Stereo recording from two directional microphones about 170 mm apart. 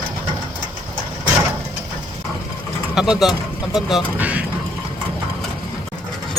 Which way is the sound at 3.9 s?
10° right (ahead or behind).